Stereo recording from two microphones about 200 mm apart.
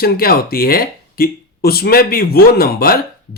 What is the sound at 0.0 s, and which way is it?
Speech, 50° left (ahead or behind).